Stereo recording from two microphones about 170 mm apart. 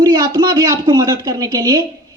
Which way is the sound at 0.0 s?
25° right (ahead or behind).